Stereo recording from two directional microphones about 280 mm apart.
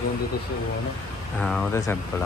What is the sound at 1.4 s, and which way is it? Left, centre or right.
Speech, centre.